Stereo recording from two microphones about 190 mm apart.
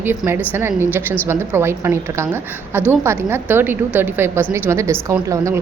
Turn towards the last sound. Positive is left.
turn(degrees=-15)  # may be behind; listen again after turning